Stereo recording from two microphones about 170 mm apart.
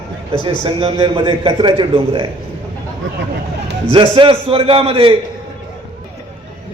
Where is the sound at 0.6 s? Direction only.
30° right (ahead or behind).